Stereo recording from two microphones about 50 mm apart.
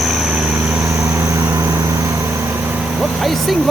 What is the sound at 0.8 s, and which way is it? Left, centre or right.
Vehicle, right.